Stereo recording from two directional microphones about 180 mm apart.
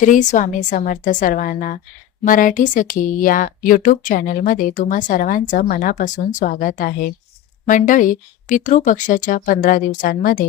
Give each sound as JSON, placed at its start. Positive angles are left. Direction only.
{"t": 0.0, "sound": "speech", "side_deg": 45}